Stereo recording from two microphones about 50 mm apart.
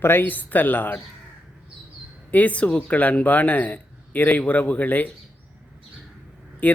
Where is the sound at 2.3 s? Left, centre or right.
Left.